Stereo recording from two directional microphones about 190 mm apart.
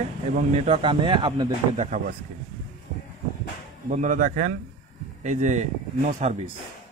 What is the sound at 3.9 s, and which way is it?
Speech, 40° right (ahead or behind).